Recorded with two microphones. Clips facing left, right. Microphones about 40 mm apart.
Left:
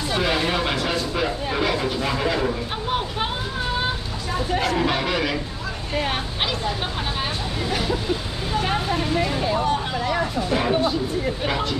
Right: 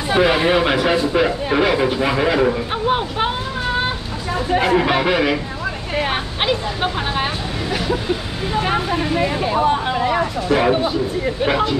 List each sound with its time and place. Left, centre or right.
0.1 s speech: right
8.5 s speech: centre